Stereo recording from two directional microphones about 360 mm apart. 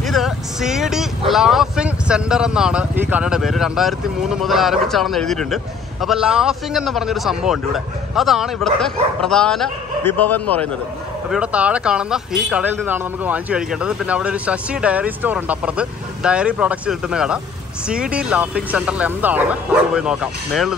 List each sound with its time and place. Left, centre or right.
0.0 s speech: centre